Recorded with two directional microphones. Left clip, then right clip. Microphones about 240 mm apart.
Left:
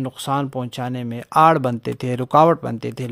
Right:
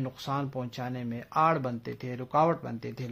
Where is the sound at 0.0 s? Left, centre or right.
Left.